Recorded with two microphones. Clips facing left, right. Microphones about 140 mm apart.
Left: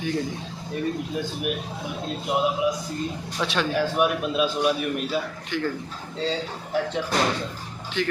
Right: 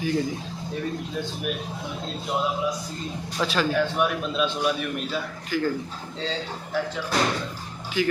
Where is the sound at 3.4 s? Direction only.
Centre (ahead or behind).